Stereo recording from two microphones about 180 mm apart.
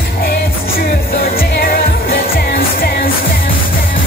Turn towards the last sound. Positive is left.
turn(degrees=55)  # may be behind; listen again after turning